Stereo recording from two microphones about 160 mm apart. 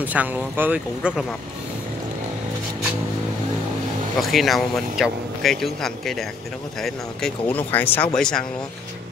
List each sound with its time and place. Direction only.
0.0 s speech: 10° right (ahead or behind)
4.2 s speech: centre (ahead or behind)